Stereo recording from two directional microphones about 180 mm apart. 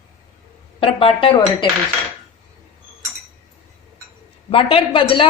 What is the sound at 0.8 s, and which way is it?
Speech, 30° left (ahead or behind).